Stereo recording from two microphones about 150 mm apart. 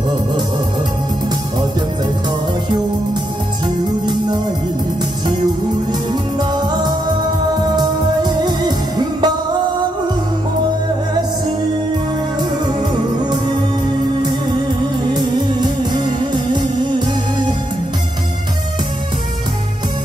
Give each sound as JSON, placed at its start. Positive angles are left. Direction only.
{"t": 3.6, "sound": "music", "side_deg": -30}
{"t": 6.5, "sound": "music", "side_deg": -30}
{"t": 15.1, "sound": "music", "side_deg": -30}